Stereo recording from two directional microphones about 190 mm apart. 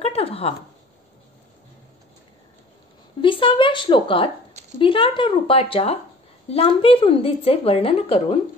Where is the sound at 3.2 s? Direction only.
25° left (ahead or behind).